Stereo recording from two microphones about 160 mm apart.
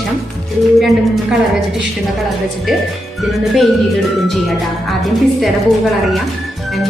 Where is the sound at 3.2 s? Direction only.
Centre (ahead or behind).